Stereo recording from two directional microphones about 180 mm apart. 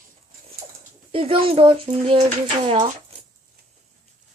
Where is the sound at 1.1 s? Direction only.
30° right (ahead or behind).